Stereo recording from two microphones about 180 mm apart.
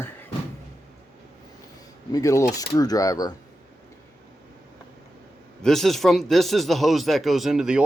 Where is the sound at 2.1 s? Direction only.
15° left (ahead or behind).